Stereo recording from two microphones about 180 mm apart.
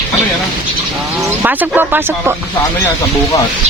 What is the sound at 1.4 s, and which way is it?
Speech, 10° right (ahead or behind).